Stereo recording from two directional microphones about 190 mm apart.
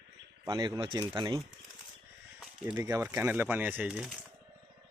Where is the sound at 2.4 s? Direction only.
5° right (ahead or behind).